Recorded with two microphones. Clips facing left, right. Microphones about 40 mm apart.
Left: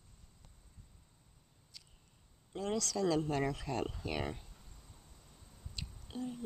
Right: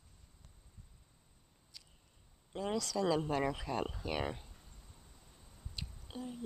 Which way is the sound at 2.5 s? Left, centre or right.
Centre.